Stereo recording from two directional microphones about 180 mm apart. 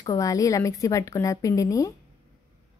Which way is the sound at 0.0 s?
20° left (ahead or behind).